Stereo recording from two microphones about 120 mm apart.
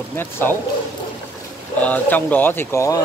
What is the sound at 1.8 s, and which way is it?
Speech, 15° left (ahead or behind).